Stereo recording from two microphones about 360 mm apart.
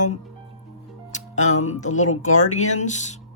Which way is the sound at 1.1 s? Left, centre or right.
Centre.